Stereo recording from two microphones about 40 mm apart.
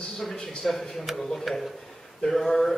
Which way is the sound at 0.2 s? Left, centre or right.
Centre.